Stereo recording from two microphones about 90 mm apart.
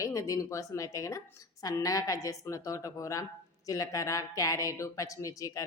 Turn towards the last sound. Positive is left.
turn(degrees=40)  # may be behind; listen again after turning